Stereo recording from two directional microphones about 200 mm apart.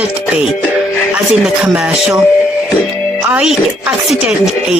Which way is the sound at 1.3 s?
5° right (ahead or behind).